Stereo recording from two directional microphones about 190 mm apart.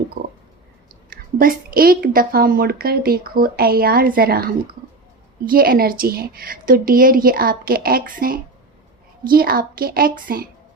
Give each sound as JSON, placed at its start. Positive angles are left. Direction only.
{"t": 0.2, "sound": "a sound", "side_deg": -55}
{"t": 1.4, "sound": "a woman's voice", "side_deg": -50}
{"t": 5.5, "sound": "a woman's voice", "side_deg": -50}